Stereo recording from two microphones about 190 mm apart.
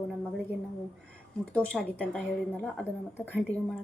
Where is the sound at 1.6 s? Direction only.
5° left (ahead or behind).